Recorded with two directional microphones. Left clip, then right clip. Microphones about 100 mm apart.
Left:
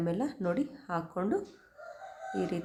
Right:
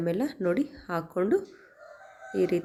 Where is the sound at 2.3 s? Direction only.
35° right (ahead or behind).